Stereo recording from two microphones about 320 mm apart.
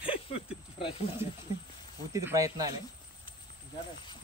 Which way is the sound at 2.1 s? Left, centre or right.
Centre.